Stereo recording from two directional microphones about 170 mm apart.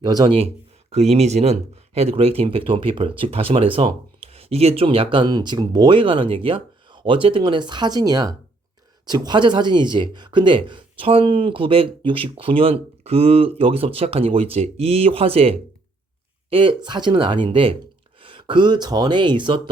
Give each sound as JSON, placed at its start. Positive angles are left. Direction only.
{"t": 0.0, "sound": "speech", "side_deg": -25}